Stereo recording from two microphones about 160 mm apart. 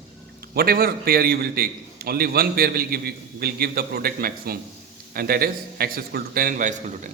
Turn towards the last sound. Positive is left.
turn(degrees=-50)  # may be behind; listen again after turning